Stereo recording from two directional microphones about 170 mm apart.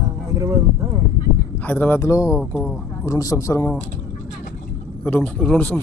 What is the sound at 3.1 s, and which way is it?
Speech, 20° left (ahead or behind).